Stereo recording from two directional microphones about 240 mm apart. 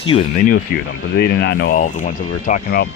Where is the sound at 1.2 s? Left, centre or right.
Left.